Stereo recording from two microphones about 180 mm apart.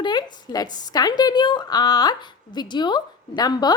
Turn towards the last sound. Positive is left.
turn(degrees=20)  # may be behind; listen again after turning